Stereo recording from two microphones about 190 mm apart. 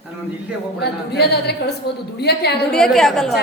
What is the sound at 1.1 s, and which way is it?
Speech, 60° left (ahead or behind).